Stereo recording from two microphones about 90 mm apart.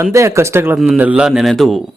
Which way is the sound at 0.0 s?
35° right (ahead or behind).